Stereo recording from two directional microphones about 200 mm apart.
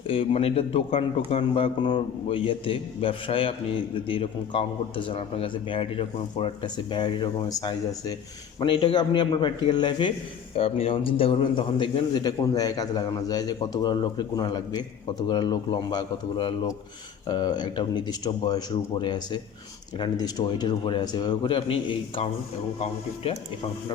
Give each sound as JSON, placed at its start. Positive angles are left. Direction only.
{"t": 0.1, "sound": "a man's voice", "side_deg": 30}